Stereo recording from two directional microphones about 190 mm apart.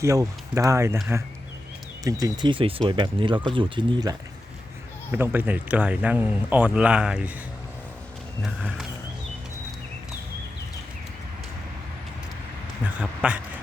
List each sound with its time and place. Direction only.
0.0 s speech: 15° right (ahead or behind)
2.0 s speech: 20° right (ahead or behind)
5.1 s speech: 10° right (ahead or behind)
8.4 s a sound: centre (ahead or behind)
12.8 s speech: 5° right (ahead or behind)